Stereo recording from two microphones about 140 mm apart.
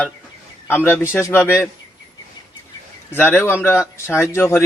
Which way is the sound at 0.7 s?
15° left (ahead or behind).